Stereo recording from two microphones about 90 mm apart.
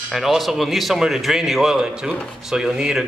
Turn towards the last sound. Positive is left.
turn(degrees=-5)  # may be behind; listen again after turning